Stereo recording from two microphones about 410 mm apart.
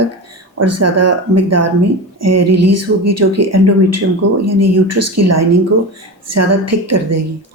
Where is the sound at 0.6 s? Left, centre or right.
Right.